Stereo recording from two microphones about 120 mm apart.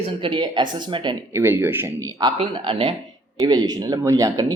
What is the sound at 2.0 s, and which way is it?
Speech, 30° right (ahead or behind).